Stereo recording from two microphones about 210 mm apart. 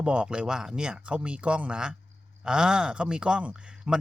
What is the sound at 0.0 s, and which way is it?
A man's voice, 5° right (ahead or behind).